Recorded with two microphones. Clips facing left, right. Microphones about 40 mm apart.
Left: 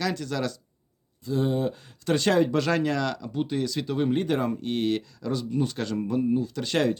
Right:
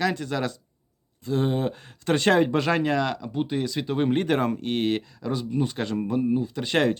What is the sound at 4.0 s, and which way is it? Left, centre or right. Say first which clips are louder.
Speech: right 2 dB; right.